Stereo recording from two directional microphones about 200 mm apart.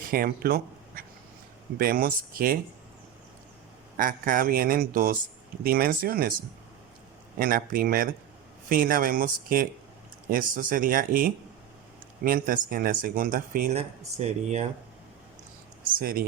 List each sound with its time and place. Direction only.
0.0 s a sound: 45° right (ahead or behind)
1.8 s speech: 45° right (ahead or behind)
3.9 s speech: 45° right (ahead or behind)
7.3 s speech: 45° right (ahead or behind)
16.0 s speech: 45° right (ahead or behind)